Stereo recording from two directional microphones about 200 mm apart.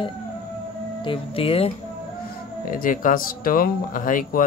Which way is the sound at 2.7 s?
45° left (ahead or behind).